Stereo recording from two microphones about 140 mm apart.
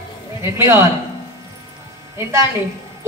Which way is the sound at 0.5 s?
15° right (ahead or behind).